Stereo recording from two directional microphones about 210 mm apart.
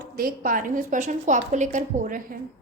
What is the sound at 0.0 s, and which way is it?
A woman's voice, 45° right (ahead or behind).